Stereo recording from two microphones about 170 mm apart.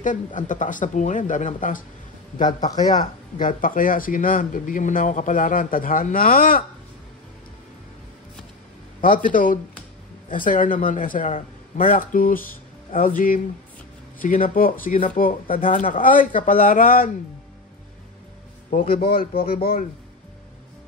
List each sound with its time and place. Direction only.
0.0 s speech: 50° left (ahead or behind)
2.7 s a man's voice: 25° left (ahead or behind)
3.0 s speech: 50° left (ahead or behind)
9.0 s speech: 55° left (ahead or behind)
18.7 s a man's voice: 55° left (ahead or behind)